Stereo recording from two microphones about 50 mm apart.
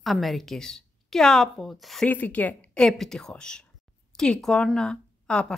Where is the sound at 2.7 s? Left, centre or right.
Centre.